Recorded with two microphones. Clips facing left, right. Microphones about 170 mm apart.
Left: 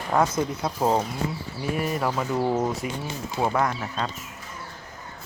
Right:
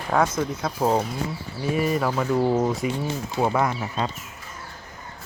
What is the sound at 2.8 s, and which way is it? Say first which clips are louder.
Speech: right 5 dB; 50° left (ahead or behind).